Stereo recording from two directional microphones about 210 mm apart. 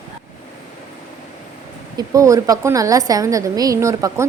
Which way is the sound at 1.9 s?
15° right (ahead or behind).